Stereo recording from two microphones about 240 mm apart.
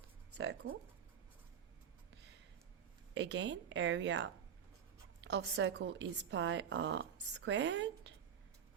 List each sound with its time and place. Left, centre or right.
0.3 s a woman's voice: right
3.2 s a woman's voice: right